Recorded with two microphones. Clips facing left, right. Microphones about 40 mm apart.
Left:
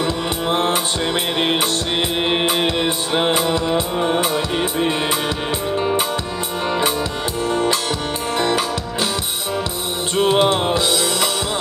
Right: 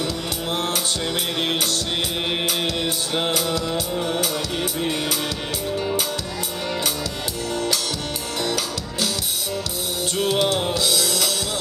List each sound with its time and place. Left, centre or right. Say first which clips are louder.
0.5 s music: left 6 dB; left
7.5 s music: left 4 dB; left
10.2 s music: left 5 dB; left